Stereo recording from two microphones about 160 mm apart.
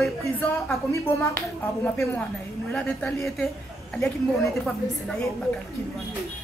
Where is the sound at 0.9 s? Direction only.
20° left (ahead or behind).